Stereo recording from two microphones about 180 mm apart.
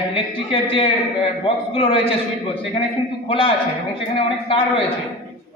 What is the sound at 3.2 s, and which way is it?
Speech, 30° left (ahead or behind).